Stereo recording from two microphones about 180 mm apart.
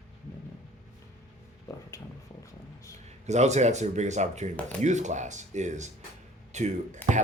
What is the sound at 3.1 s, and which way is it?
Speech, 40° right (ahead or behind).